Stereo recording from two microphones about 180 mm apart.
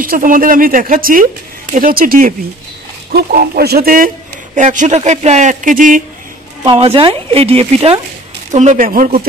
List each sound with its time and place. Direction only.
0.0 s a man's voice: 50° right (ahead or behind)
6.6 s a woman's voice: 30° right (ahead or behind); by 9.2 s 50° right (ahead or behind)